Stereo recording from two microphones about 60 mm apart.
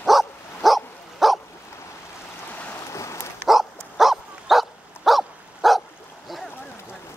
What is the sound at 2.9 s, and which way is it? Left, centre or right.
Dog, left.